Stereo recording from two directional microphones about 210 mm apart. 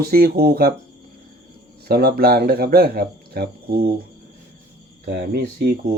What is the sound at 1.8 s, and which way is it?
Speech, 45° right (ahead or behind).